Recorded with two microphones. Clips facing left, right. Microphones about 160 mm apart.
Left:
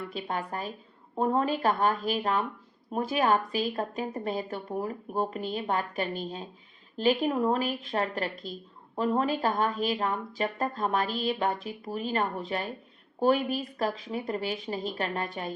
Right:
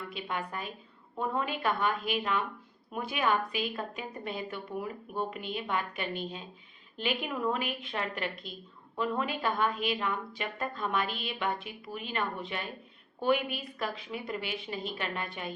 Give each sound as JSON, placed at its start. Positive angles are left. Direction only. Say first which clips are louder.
{"t": 0.1, "sound": "speech", "louder": "left 3 dB", "side_deg": 40}